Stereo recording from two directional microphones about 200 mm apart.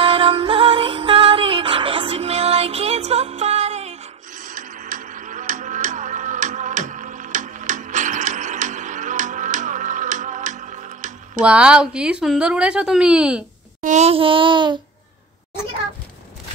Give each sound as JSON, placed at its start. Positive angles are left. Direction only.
{"t": 0.0, "sound": "music", "side_deg": -25}
{"t": 11.4, "sound": "a woman's voice", "side_deg": -5}
{"t": 13.7, "sound": "child singing", "side_deg": -35}